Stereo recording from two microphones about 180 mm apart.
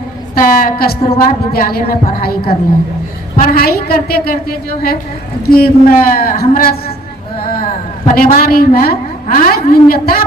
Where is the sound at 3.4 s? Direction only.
55° left (ahead or behind).